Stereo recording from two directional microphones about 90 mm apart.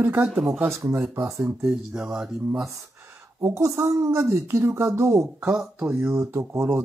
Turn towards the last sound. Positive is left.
turn(degrees=-30)  # may be behind; listen again after turning